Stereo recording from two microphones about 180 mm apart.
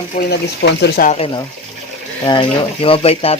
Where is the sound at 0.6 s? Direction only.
65° left (ahead or behind).